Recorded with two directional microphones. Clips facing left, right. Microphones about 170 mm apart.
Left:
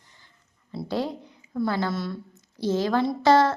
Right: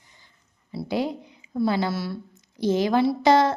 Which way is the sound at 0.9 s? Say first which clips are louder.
Right 2 dB; 15° right (ahead or behind).